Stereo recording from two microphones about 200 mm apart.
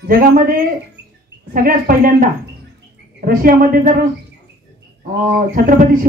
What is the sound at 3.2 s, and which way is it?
Speech, 45° right (ahead or behind).